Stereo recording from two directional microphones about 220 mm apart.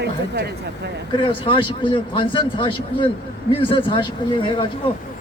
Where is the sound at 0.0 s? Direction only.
50° right (ahead or behind).